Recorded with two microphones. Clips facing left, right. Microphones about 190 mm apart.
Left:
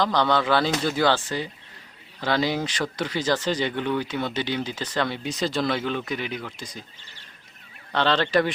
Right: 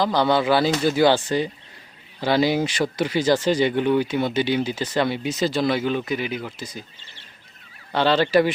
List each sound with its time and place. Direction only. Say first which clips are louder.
0.0 s speech: right 3 dB; 10° right (ahead or behind)
7.9 s speech: right 4 dB; 10° right (ahead or behind)